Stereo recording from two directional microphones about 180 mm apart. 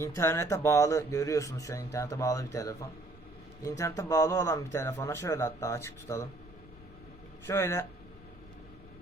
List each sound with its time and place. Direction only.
0.0 s speech: 15° left (ahead or behind)
7.4 s speech: 15° left (ahead or behind)